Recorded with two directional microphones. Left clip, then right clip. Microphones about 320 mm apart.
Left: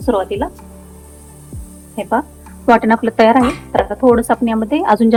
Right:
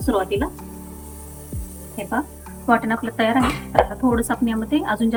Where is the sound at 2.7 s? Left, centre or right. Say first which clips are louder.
Left 8 dB; left.